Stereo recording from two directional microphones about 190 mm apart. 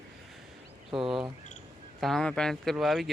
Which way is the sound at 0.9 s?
25° right (ahead or behind).